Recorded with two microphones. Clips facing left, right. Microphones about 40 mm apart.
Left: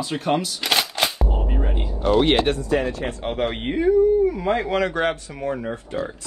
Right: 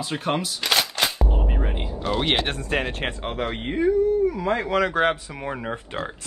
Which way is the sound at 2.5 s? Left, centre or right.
Right.